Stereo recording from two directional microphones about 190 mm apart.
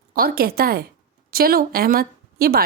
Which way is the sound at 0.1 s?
50° right (ahead or behind).